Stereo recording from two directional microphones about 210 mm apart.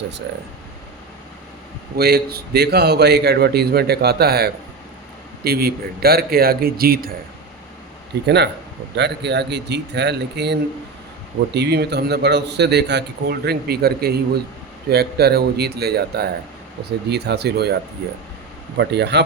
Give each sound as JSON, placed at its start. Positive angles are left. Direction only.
{"t": 2.0, "sound": "a man's voice", "side_deg": -50}
{"t": 8.1, "sound": "a man's voice", "side_deg": -55}
{"t": 18.8, "sound": "speech", "side_deg": -55}